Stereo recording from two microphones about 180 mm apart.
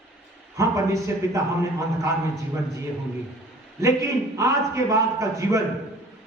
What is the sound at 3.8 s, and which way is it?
A man's voice, 15° right (ahead or behind).